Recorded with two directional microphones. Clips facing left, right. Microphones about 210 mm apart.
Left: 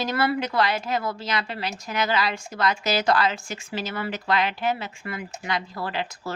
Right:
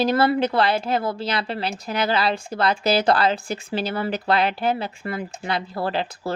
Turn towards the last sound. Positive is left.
turn(degrees=-30)  # may be behind; listen again after turning